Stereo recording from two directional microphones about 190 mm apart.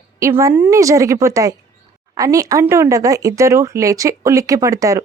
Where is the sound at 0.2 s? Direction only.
15° right (ahead or behind).